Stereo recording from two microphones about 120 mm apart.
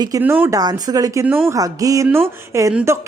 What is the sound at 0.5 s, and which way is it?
Speech, 35° right (ahead or behind).